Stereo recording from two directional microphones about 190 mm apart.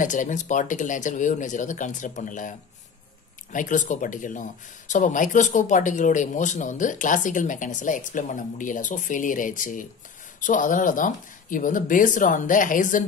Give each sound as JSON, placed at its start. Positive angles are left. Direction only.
{"t": 0.0, "sound": "speech", "side_deg": 40}
{"t": 3.5, "sound": "speech", "side_deg": 40}